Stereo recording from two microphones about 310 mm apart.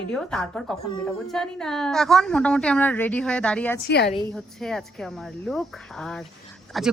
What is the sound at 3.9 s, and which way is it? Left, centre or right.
Speech, left.